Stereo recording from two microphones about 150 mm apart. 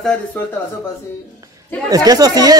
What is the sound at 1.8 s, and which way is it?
Speech, 25° right (ahead or behind).